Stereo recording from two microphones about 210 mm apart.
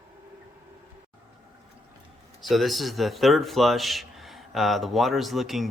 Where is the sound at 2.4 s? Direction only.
Centre (ahead or behind).